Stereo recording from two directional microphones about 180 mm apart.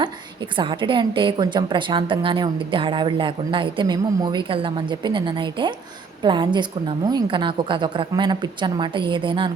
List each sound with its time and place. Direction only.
0.5 s a woman's voice: 25° right (ahead or behind)